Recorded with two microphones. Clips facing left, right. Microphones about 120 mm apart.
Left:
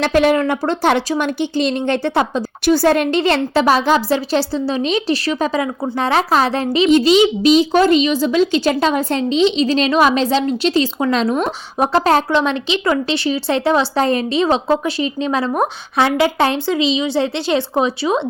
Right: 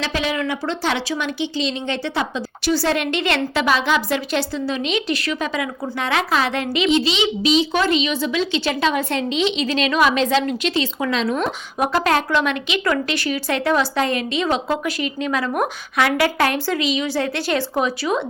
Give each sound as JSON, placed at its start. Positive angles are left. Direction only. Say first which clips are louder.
{"t": 0.0, "sound": "speech", "louder": "left 9 dB", "side_deg": 55}